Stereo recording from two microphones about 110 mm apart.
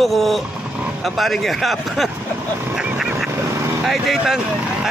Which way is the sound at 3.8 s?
Centre (ahead or behind).